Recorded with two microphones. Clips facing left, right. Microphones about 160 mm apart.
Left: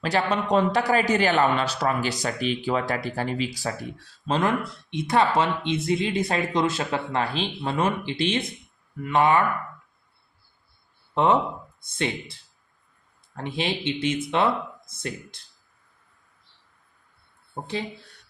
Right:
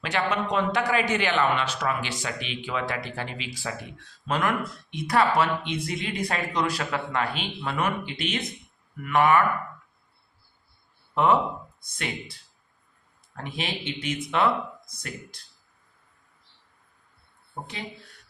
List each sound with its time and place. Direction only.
0.0 s a man's voice: 35° left (ahead or behind)
11.1 s speech: 25° left (ahead or behind)